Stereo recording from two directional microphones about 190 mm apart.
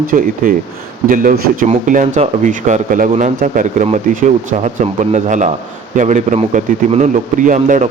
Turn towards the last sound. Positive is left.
turn(degrees=-40)  # may be behind; listen again after turning